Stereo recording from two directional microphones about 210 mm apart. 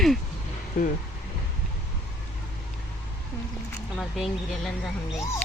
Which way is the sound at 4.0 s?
Centre (ahead or behind).